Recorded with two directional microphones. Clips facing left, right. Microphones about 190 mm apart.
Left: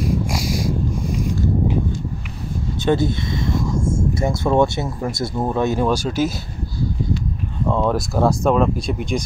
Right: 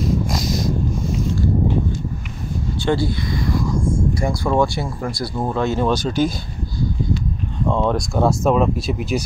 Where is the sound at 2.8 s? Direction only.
20° left (ahead or behind).